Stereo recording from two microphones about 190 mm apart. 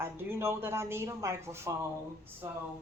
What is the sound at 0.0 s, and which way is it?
Speech, 15° right (ahead or behind).